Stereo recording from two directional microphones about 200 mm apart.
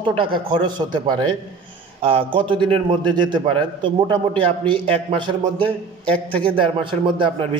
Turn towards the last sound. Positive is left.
turn(degrees=-25)  # may be behind; listen again after turning